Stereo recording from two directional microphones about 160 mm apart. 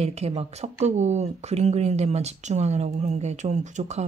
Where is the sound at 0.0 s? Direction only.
40° right (ahead or behind).